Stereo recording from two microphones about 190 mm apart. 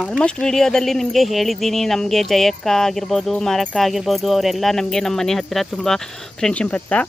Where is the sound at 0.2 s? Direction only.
5° left (ahead or behind).